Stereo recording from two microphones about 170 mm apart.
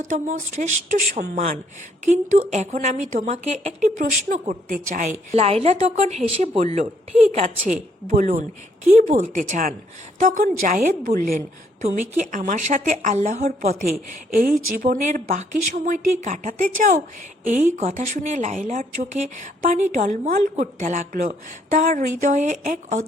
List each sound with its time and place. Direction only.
0.0 s a woman's voice: 45° right (ahead or behind)
5.3 s a woman's voice: 35° right (ahead or behind)